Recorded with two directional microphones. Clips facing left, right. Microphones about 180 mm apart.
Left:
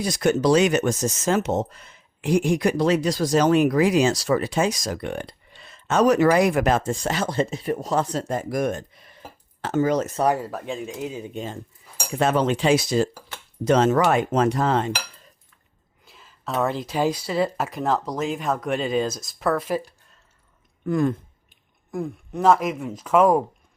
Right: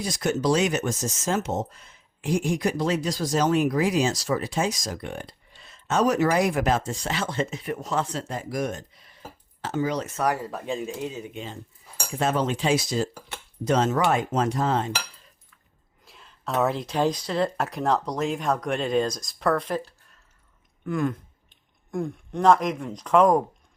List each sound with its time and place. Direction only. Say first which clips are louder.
0.0 s speech: left 5 dB; 70° left (ahead or behind); by 10.1 s 50° left (ahead or behind)
10.5 s speech: even; centre (ahead or behind)
11.3 s speech: left 5 dB; 50° left (ahead or behind)
12.1 s speech: left 4 dB; 70° left (ahead or behind)
16.0 s speech: left 1 dB; centre (ahead or behind)
20.8 s speech: left 4 dB; 35° left (ahead or behind)
21.9 s speech: even; 5° left (ahead or behind)